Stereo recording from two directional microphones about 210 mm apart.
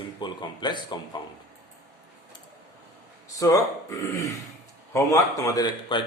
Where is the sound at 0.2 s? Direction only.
20° left (ahead or behind).